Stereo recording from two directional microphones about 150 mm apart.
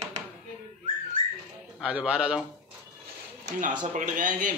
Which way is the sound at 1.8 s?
10° right (ahead or behind).